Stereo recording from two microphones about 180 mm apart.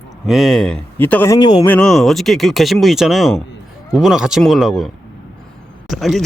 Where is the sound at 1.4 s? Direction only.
25° left (ahead or behind).